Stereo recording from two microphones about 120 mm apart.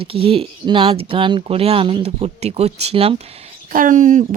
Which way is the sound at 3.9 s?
90° right.